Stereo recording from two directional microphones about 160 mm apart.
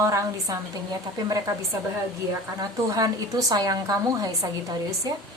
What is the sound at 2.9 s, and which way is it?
A woman's voice, 20° right (ahead or behind).